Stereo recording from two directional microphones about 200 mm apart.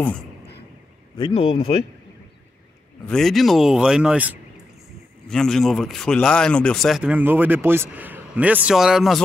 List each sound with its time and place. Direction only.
1.1 s speech: 25° left (ahead or behind)
3.1 s speech: centre (ahead or behind)